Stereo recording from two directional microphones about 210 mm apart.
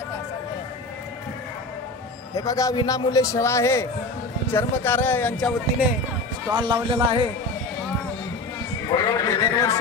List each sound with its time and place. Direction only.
2.3 s a man's voice: 15° left (ahead or behind)
6.5 s a man's voice: 20° right (ahead or behind)
8.8 s speech: 15° left (ahead or behind)